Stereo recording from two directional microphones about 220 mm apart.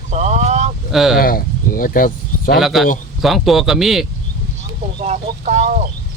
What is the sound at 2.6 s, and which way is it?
Speech, centre (ahead or behind).